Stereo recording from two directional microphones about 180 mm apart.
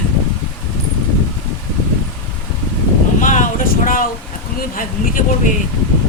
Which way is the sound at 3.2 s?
45° left (ahead or behind).